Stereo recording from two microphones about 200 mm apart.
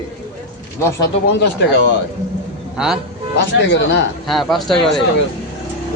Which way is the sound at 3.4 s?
60° left (ahead or behind).